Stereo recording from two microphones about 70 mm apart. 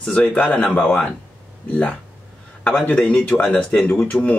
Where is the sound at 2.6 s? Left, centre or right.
Left.